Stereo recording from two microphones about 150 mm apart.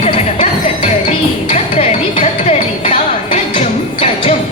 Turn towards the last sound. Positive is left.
turn(degrees=40)  # may be behind; listen again after turning